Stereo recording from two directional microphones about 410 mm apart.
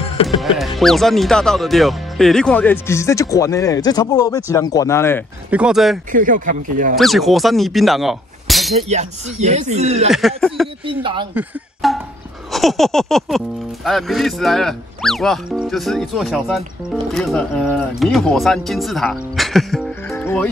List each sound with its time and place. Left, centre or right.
0.0 s music: centre
0.7 s speech: centre
6.1 s speech: centre
7.0 s speech: centre
8.8 s speech: centre
10.1 s speech: centre
10.9 s speech: centre
11.8 s speech: centre
12.4 s a sound: centre
13.8 s speech: centre